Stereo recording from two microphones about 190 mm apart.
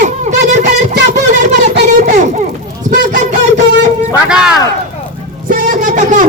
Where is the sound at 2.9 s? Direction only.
40° right (ahead or behind).